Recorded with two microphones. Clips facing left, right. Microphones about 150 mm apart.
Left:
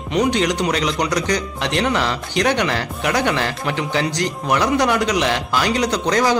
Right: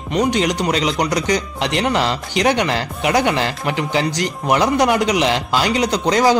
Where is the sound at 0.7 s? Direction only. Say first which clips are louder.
Right 1 dB; 15° right (ahead or behind).